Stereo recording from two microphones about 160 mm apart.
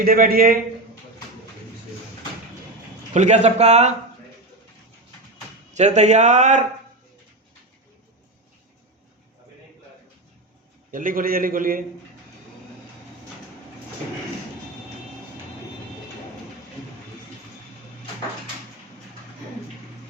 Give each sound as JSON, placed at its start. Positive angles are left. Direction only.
{"t": 0.0, "sound": "a man's voice", "side_deg": -65}
{"t": 3.1, "sound": "speech", "side_deg": -45}
{"t": 5.7, "sound": "speech", "side_deg": -45}
{"t": 10.9, "sound": "a man's voice", "side_deg": -60}